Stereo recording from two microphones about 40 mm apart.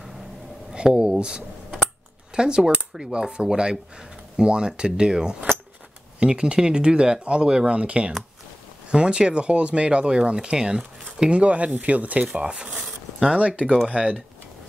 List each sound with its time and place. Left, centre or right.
0.7 s speech: right
2.3 s speech: centre
11.2 s speech: right
14.0 s speech: centre